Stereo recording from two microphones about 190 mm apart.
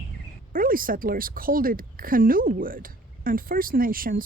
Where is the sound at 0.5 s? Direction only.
45° right (ahead or behind).